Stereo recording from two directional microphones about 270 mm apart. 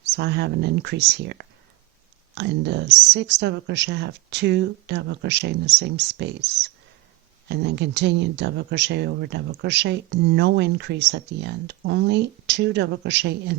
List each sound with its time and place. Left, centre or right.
0.1 s speech: right